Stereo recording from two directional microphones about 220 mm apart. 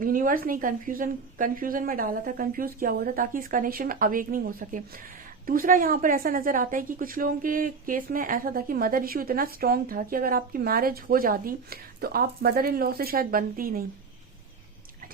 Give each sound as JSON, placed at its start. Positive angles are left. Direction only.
{"t": 0.0, "sound": "a woman's voice", "side_deg": -40}